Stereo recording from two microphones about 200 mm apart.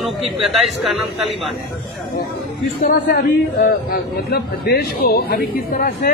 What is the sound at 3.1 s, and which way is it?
A man's voice, 50° left (ahead or behind).